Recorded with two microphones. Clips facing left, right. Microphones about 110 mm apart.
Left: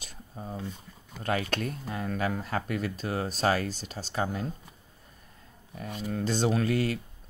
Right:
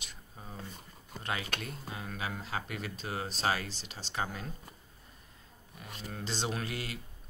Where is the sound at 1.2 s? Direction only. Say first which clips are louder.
Left 8 dB; 40° left (ahead or behind).